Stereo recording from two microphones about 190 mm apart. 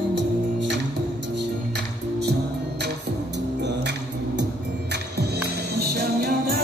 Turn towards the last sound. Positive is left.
turn(degrees=-50)  # may be behind; listen again after turning